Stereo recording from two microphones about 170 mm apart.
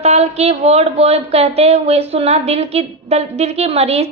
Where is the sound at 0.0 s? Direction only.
40° right (ahead or behind).